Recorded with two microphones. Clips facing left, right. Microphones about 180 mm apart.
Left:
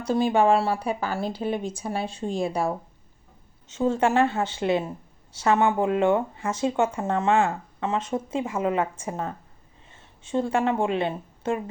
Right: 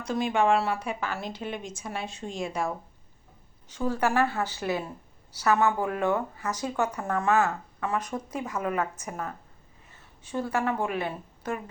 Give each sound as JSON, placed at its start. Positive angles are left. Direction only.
{"t": 0.0, "sound": "a woman's voice", "side_deg": 30}